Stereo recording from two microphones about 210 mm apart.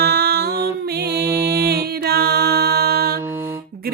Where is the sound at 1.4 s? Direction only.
50° right (ahead or behind).